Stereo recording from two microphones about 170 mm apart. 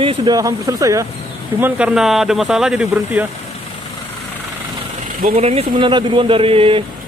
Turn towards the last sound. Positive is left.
turn(degrees=-30)  # may be behind; listen again after turning